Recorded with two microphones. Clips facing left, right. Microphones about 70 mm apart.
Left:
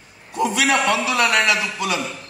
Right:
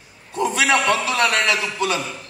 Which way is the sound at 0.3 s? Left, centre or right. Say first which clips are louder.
Even; right.